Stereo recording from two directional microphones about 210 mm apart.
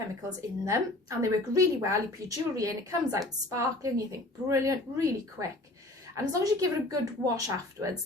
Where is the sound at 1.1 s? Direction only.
15° right (ahead or behind).